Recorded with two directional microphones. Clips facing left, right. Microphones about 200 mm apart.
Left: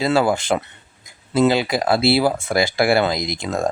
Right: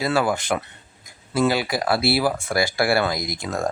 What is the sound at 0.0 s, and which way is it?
Speech, 25° left (ahead or behind).